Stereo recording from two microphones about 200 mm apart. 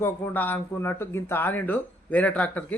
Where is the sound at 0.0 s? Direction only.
10° left (ahead or behind).